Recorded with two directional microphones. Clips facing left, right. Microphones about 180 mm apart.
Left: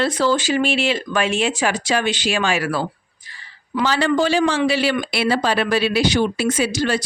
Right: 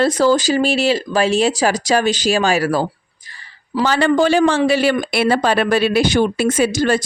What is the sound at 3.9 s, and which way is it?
Speech, 55° right (ahead or behind).